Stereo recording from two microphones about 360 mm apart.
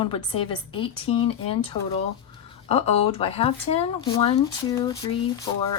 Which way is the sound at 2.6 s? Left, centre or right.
Centre.